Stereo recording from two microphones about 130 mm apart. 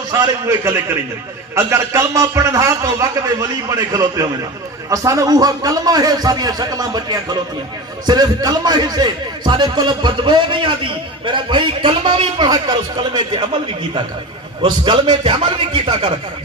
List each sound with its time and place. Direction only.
0.1 s a man's voice: 25° right (ahead or behind); by 16.1 s 40° right (ahead or behind)